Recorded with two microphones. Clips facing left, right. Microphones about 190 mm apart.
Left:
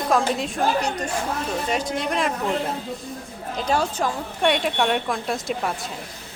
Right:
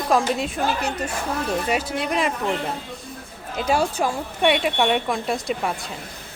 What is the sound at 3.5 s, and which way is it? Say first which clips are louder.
A woman's voice: right 2 dB; 10° right (ahead or behind).